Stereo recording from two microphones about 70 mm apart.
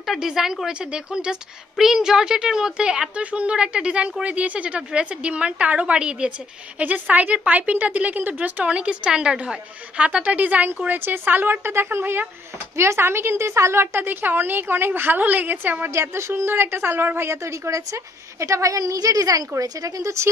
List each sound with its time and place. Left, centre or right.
0.0 s a woman's voice: centre; by 15.9 s right
15.9 s speech: right
17.4 s a woman's voice: right